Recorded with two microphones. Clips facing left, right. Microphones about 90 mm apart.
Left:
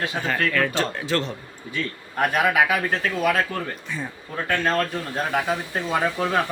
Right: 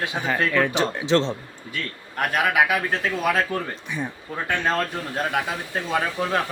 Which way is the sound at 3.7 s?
15° right (ahead or behind).